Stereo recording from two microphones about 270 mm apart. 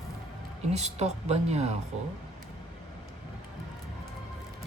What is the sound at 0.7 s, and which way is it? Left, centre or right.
Speech, right.